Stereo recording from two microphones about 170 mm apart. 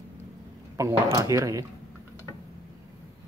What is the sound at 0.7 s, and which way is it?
Speech, 20° right (ahead or behind).